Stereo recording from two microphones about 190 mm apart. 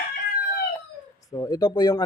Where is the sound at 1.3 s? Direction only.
20° left (ahead or behind).